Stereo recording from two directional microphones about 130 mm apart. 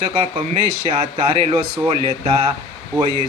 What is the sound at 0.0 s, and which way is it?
Speech, 50° right (ahead or behind).